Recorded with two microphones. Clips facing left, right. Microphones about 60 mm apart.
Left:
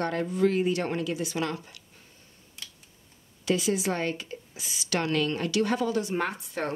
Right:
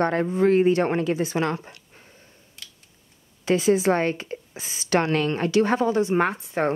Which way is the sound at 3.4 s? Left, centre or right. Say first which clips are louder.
Right 7 dB; right.